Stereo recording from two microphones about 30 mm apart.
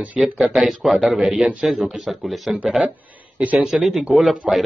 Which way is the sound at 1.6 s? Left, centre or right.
Centre.